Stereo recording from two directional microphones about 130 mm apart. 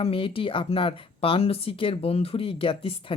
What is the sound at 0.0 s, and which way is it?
Speech, 45° left (ahead or behind).